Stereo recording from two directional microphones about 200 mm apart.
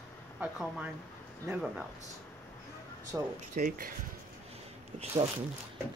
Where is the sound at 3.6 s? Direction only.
45° right (ahead or behind).